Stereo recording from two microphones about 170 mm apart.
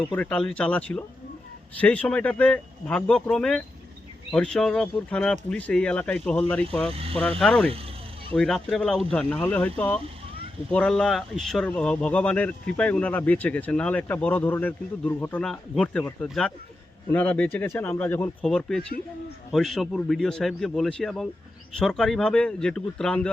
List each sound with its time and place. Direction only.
0.2 s speech: 5° left (ahead or behind)
6.9 s speech: 35° right (ahead or behind)
7.2 s speech: 5° left (ahead or behind)